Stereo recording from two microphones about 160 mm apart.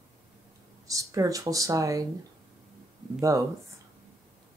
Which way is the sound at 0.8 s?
20° right (ahead or behind).